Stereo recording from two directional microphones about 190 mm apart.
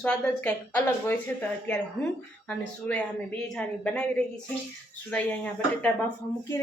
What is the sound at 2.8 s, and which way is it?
Speech, 5° left (ahead or behind).